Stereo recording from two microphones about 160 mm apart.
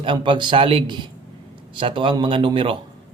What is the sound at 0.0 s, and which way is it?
Speech, 30° right (ahead or behind).